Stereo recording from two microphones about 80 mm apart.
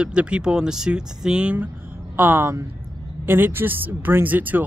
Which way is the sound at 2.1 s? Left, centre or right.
Right.